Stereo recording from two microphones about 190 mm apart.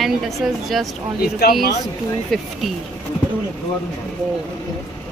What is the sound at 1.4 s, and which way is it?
Speech, 60° left (ahead or behind).